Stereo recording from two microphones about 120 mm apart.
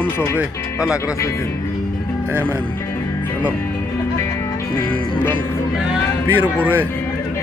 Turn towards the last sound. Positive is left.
turn(degrees=-15)  # may be behind; listen again after turning